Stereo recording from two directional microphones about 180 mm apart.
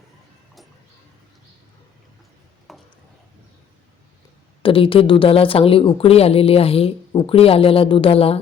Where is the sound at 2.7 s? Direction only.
Centre (ahead or behind).